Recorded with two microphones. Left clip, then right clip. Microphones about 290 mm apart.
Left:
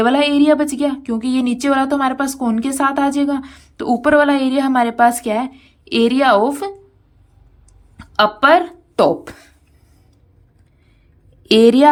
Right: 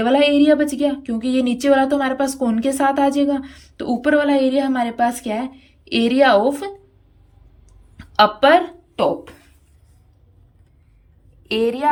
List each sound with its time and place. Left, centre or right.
0.0 s speech: centre
7.9 s speech: centre
11.4 s a woman's voice: left